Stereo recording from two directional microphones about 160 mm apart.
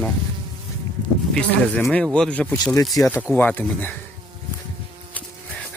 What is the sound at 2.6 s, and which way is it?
Speech, 20° left (ahead or behind).